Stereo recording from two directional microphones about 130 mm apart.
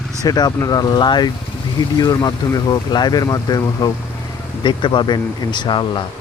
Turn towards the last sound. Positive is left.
turn(degrees=35)  # may be behind; listen again after turning